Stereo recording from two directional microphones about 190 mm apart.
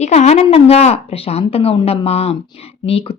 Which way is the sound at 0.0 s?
35° left (ahead or behind).